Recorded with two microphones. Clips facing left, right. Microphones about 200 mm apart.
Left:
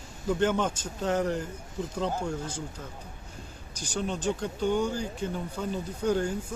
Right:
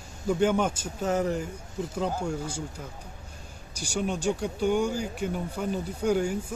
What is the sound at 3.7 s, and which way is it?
Speech, 10° right (ahead or behind).